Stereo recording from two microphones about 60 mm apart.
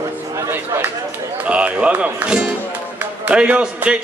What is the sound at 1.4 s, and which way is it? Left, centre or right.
Music, right.